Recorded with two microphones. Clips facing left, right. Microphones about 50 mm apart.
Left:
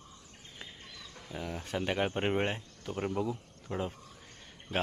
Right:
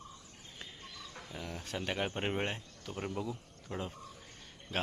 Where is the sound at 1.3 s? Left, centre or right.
Centre.